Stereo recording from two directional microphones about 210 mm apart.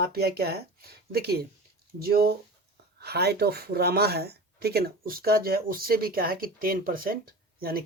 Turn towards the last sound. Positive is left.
turn(degrees=-45)  # may be behind; listen again after turning